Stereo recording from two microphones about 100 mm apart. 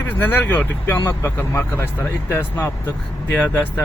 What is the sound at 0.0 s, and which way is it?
Speech, 20° left (ahead or behind).